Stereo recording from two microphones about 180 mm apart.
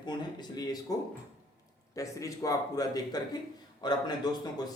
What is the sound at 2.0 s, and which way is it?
A man's voice, 20° left (ahead or behind).